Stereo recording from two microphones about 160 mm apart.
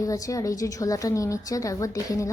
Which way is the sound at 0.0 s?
20° left (ahead or behind).